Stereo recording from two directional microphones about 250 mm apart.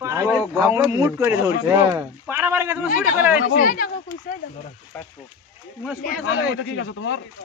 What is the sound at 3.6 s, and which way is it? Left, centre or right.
Speech, left.